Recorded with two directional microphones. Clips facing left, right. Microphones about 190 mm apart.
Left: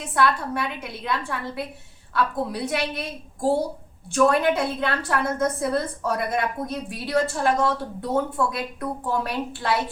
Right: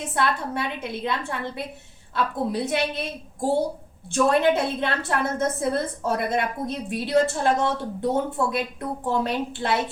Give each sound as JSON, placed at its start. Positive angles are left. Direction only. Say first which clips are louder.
{"t": 0.0, "sound": "a woman's voice", "louder": "left 2 dB", "side_deg": -25}